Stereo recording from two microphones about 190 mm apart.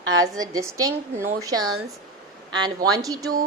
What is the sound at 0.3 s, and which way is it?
A woman's voice, 20° right (ahead or behind).